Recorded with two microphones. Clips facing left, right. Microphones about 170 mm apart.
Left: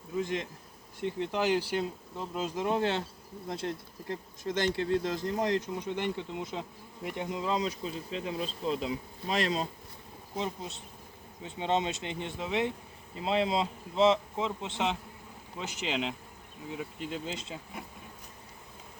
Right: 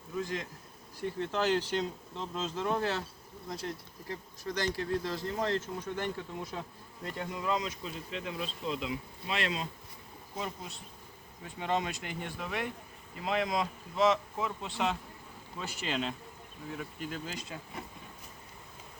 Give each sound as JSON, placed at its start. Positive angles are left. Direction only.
{"t": 0.1, "sound": "speech", "side_deg": 20}
{"t": 10.3, "sound": "speech", "side_deg": 25}